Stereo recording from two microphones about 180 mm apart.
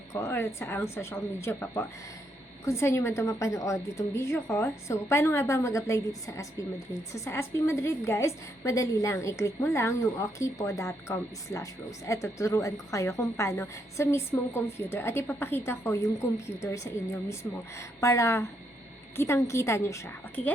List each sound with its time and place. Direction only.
0.1 s a woman's voice: 15° left (ahead or behind)